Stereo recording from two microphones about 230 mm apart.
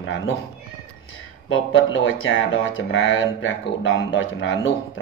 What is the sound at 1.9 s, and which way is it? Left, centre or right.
Speech, left.